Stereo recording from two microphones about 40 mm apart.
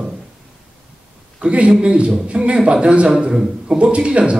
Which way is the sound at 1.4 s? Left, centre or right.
Right.